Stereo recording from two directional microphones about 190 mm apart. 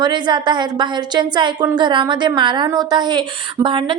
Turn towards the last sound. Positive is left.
turn(degrees=-25)  # may be behind; listen again after turning